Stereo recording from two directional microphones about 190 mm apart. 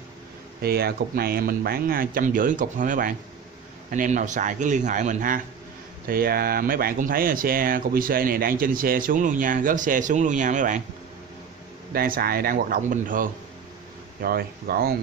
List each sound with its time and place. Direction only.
0.6 s a man's voice: 55° right (ahead or behind)
11.9 s speech: 50° right (ahead or behind)